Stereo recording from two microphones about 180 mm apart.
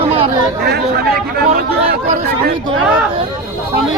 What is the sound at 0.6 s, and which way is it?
Speech, 60° right (ahead or behind).